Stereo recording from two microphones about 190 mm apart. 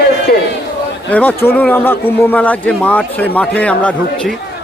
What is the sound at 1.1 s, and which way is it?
Speech, 10° left (ahead or behind).